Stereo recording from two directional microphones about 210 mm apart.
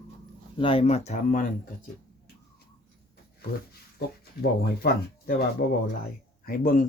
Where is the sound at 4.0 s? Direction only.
50° left (ahead or behind).